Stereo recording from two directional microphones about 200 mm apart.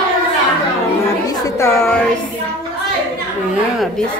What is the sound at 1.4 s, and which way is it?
Speech, 15° left (ahead or behind).